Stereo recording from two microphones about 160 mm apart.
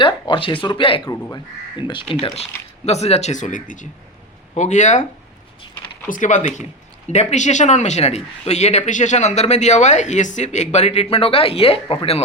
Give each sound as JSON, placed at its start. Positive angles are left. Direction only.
{"t": 0.0, "sound": "speech", "side_deg": 30}
{"t": 2.8, "sound": "speech", "side_deg": 40}
{"t": 6.1, "sound": "speech", "side_deg": 55}